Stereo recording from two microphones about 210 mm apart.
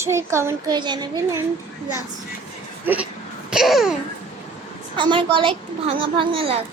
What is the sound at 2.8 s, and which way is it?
Speech, 10° right (ahead or behind).